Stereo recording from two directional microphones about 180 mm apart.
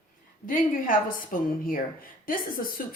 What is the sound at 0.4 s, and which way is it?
Speech, 50° left (ahead or behind).